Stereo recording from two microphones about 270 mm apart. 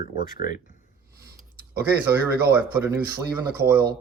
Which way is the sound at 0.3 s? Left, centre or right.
Left.